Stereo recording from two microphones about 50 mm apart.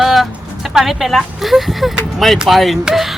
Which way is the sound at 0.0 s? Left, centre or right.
Centre.